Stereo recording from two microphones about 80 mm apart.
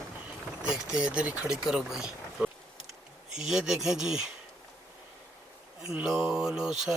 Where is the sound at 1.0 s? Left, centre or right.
Centre.